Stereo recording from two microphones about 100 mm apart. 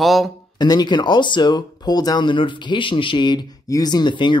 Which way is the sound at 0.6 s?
45° left (ahead or behind).